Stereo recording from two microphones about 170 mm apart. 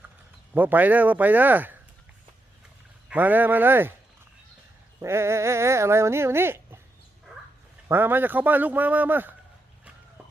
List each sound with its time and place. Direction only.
0.5 s speech: 10° right (ahead or behind)
3.1 s speech: 10° right (ahead or behind)
4.9 s speech: 15° right (ahead or behind)
7.9 s speech: 10° right (ahead or behind)